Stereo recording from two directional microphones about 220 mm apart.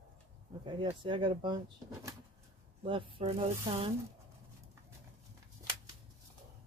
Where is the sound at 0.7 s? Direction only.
20° right (ahead or behind).